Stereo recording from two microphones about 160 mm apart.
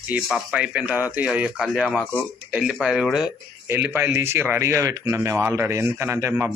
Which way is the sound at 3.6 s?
10° right (ahead or behind).